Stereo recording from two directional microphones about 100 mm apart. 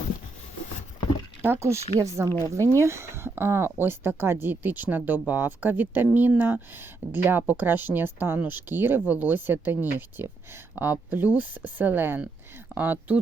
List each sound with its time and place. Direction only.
1.4 s speech: 25° right (ahead or behind)